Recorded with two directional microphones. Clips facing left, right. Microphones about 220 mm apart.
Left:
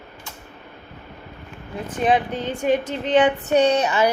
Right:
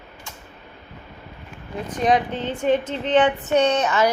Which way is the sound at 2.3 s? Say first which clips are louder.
Even; 10° left (ahead or behind).